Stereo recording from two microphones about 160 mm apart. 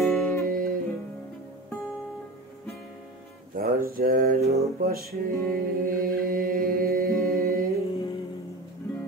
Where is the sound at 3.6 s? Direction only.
65° right (ahead or behind).